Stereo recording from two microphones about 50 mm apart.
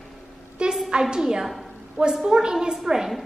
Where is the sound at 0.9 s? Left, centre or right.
Centre.